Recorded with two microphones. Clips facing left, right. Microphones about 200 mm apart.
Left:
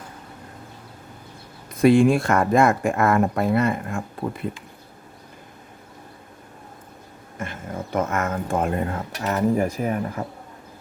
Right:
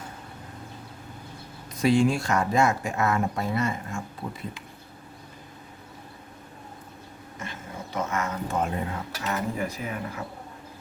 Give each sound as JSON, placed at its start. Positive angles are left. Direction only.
{"t": 1.7, "sound": "speech", "side_deg": 55}
{"t": 7.3, "sound": "speech", "side_deg": 50}